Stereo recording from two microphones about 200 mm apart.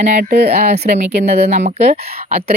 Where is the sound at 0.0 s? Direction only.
40° right (ahead or behind).